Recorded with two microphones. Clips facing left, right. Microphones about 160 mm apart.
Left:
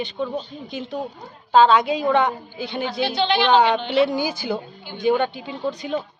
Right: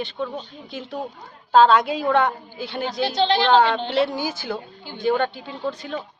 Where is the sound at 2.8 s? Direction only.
40° right (ahead or behind).